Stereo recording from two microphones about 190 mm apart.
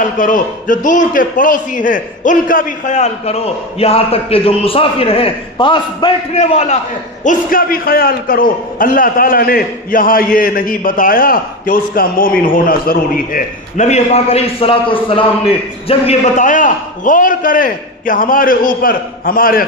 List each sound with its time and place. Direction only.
0.0 s a man's voice: 45° left (ahead or behind)
7.2 s a man's voice: 50° left (ahead or behind)